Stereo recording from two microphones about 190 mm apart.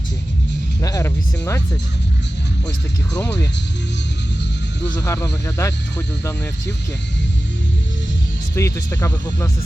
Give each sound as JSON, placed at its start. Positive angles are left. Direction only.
{"t": 0.8, "sound": "music", "side_deg": 15}
{"t": 4.9, "sound": "speech", "side_deg": 15}
{"t": 8.5, "sound": "speech", "side_deg": 15}